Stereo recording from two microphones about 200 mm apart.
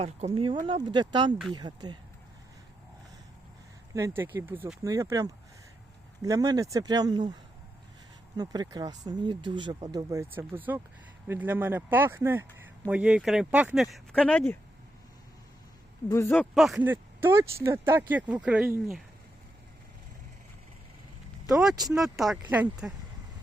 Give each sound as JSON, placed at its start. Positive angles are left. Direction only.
{"t": 0.0, "sound": "speech", "side_deg": -30}
{"t": 3.9, "sound": "speech", "side_deg": -15}
{"t": 8.4, "sound": "speech", "side_deg": -20}
{"t": 16.0, "sound": "speech", "side_deg": 15}
{"t": 21.4, "sound": "speech", "side_deg": 0}